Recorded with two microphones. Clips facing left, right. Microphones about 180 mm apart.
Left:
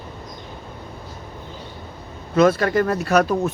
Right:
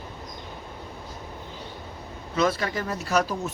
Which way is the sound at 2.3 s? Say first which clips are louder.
Left 9 dB; 55° left (ahead or behind).